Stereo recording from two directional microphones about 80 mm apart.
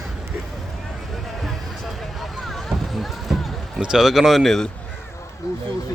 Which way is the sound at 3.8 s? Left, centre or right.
Centre.